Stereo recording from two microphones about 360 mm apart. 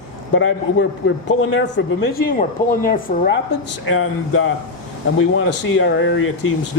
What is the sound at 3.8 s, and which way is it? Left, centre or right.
Speech, left.